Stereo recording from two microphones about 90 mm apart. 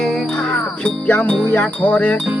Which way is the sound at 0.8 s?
20° left (ahead or behind).